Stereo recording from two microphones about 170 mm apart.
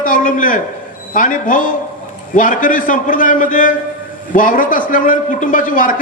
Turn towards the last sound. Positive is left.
turn(degrees=55)  # may be behind; listen again after turning